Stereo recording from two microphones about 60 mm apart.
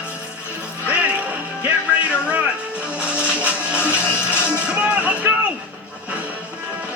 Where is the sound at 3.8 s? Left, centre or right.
Left.